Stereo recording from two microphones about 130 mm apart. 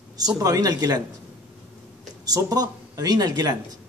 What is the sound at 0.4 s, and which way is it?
Speech, 30° right (ahead or behind).